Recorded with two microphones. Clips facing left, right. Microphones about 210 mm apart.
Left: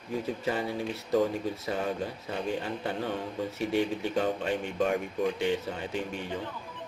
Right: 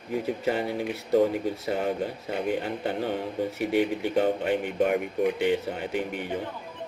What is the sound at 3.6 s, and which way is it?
Speech, 65° right (ahead or behind).